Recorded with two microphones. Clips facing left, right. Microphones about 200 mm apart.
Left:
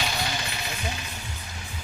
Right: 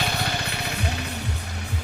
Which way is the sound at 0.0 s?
55° right (ahead or behind).